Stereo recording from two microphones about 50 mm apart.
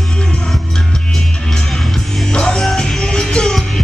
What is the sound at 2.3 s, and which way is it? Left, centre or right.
Music, centre.